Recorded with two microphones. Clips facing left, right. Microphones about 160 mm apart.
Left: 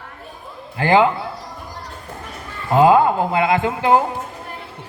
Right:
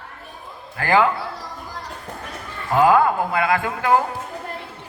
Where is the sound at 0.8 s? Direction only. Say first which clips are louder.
Left 3 dB; 20° left (ahead or behind).